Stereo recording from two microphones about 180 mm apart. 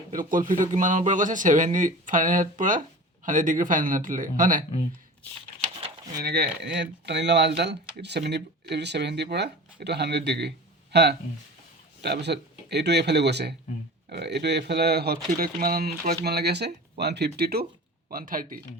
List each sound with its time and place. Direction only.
0.1 s speech: 50° right (ahead or behind)
6.2 s speech: 65° right (ahead or behind)